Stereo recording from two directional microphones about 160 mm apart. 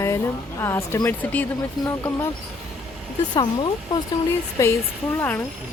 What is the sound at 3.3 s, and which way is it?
Speech, 25° left (ahead or behind).